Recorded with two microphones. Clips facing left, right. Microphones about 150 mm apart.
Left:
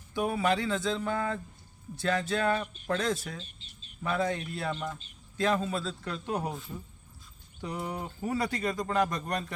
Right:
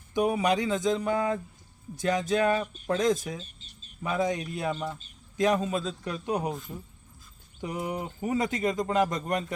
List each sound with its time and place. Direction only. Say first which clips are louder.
0.1 s speech: right 3 dB; 15° right (ahead or behind)
3.4 s bird: right 1 dB; 40° right (ahead or behind)
4.0 s speech: right 2 dB; 15° right (ahead or behind)
7.9 s speech: right 3 dB; 15° right (ahead or behind)